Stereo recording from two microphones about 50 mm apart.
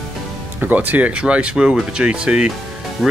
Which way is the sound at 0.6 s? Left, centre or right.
Right.